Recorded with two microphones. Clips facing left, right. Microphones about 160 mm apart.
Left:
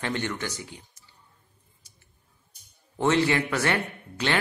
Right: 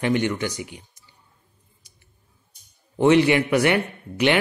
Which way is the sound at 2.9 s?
15° right (ahead or behind).